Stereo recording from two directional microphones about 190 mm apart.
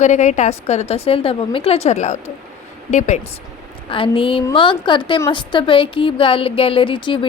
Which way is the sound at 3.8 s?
30° left (ahead or behind).